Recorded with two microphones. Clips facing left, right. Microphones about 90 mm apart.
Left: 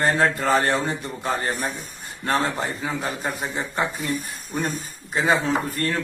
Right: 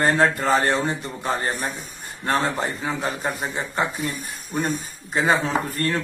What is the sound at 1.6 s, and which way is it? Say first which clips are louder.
Speech: left 1 dB; centre (ahead or behind).